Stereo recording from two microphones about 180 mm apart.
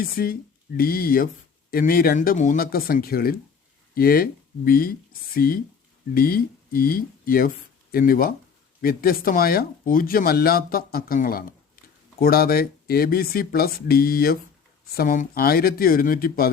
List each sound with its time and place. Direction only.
0.0 s speech: 55° left (ahead or behind)